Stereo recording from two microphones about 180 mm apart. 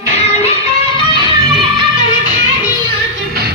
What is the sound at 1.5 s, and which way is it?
Music, 25° right (ahead or behind).